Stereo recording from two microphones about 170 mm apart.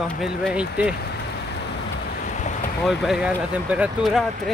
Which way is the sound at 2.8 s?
Centre (ahead or behind).